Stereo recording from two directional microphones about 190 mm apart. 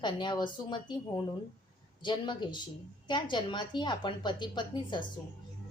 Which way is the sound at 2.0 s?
25° left (ahead or behind).